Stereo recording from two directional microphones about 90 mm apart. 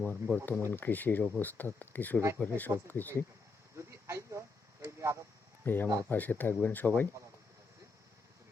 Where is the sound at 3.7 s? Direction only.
30° right (ahead or behind).